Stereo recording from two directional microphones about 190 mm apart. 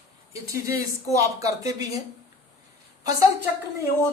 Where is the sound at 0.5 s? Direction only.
15° right (ahead or behind).